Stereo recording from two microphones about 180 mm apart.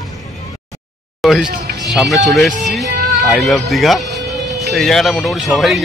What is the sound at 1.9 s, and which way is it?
Speech, centre (ahead or behind).